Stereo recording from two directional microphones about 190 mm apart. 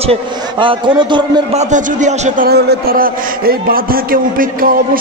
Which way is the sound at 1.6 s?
40° right (ahead or behind).